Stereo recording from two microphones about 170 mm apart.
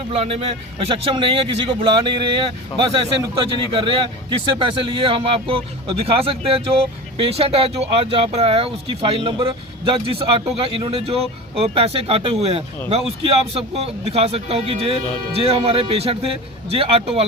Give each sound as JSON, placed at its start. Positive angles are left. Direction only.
{"t": 0.1, "sound": "speech", "side_deg": -35}